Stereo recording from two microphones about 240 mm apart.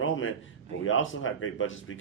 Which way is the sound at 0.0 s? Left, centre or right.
Left.